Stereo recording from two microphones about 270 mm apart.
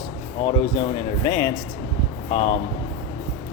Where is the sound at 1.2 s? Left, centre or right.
Centre.